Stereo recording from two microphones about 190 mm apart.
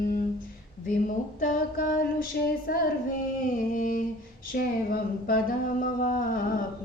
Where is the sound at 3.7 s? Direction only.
45° left (ahead or behind).